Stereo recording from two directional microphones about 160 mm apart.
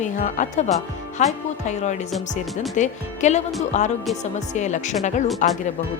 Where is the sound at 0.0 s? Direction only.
50° left (ahead or behind).